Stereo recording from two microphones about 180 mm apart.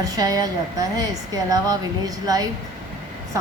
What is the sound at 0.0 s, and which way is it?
A woman's voice, 20° right (ahead or behind).